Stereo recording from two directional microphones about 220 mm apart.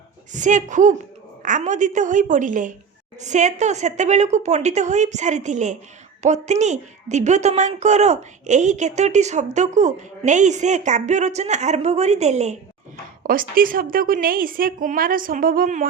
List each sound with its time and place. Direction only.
0.3 s a woman's voice: 35° right (ahead or behind)
13.6 s a woman's voice: 40° right (ahead or behind)